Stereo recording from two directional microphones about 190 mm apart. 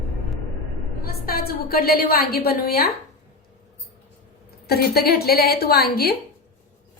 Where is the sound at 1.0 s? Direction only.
50° left (ahead or behind).